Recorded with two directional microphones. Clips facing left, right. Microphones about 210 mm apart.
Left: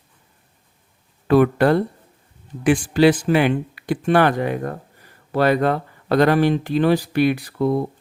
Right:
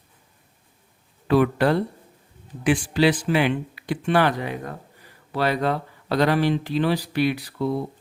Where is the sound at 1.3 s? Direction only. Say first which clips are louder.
Left 4 dB; 50° left (ahead or behind).